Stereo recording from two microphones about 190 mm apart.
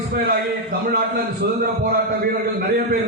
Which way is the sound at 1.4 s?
55° right (ahead or behind).